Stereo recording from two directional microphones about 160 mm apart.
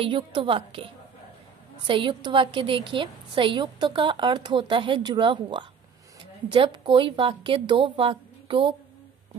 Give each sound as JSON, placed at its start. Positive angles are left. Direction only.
{"t": 0.0, "sound": "a woman's voice", "side_deg": -30}